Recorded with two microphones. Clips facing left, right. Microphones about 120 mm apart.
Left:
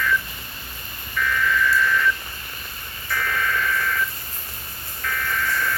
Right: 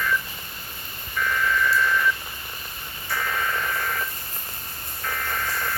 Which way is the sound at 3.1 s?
20° right (ahead or behind).